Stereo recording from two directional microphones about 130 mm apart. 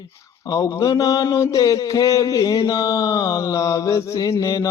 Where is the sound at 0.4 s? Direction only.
25° left (ahead or behind).